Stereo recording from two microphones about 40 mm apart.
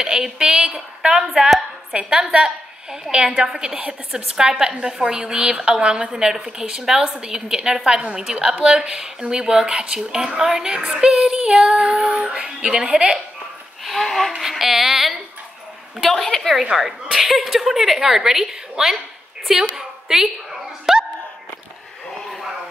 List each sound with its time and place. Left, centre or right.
0.0 s a woman's voice: centre
12.3 s a woman's voice: right
13.8 s speech: centre
14.6 s a woman's voice: centre
16.0 s a woman's voice: centre
16.7 s a woman's voice: centre
20.9 s a sound: centre